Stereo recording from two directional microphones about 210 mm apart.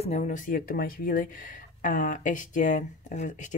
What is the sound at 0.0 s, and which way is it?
Speech, 35° left (ahead or behind).